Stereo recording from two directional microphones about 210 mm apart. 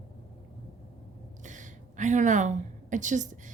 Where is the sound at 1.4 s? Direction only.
35° right (ahead or behind).